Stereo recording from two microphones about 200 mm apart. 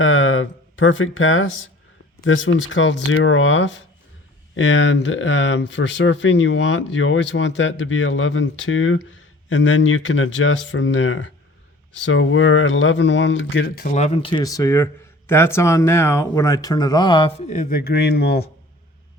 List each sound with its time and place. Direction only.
0.0 s speech: 75° left (ahead or behind)
9.5 s speech: 70° left (ahead or behind)
12.0 s speech: 85° left; by 13.8 s 65° left (ahead or behind)
13.8 s speech: 35° left (ahead or behind); by 18.5 s 55° left (ahead or behind)